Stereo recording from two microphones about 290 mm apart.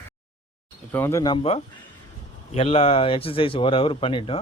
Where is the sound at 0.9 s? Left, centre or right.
Centre.